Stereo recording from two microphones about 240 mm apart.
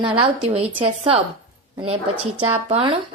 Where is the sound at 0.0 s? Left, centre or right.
Right.